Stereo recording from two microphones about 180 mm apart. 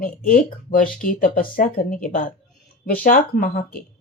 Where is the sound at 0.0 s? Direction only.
50° left (ahead or behind).